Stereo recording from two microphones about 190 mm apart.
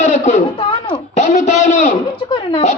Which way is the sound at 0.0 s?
40° left (ahead or behind).